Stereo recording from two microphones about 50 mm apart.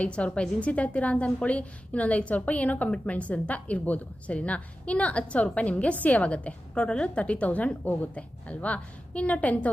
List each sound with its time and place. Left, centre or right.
0.0 s a woman's voice: left